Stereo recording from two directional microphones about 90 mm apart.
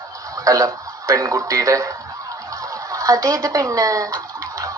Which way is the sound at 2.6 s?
40° right (ahead or behind).